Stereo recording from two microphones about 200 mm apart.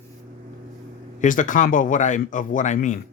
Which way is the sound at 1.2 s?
40° left (ahead or behind).